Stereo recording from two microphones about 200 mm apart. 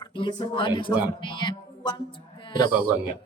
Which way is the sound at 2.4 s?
25° left (ahead or behind).